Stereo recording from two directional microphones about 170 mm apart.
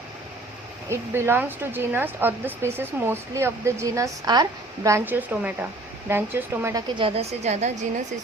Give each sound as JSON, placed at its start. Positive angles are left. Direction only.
{"t": 0.9, "sound": "speech", "side_deg": -15}
{"t": 7.0, "sound": "a woman's voice", "side_deg": -35}